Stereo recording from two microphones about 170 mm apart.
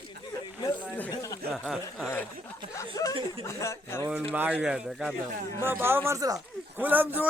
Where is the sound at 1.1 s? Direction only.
20° left (ahead or behind).